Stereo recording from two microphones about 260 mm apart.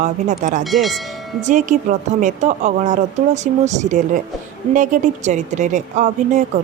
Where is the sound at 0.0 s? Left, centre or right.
Right.